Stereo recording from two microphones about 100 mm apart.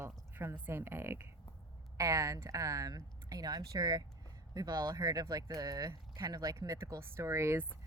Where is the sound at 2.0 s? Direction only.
35° right (ahead or behind).